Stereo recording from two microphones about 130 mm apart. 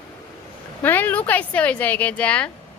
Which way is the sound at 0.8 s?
15° left (ahead or behind).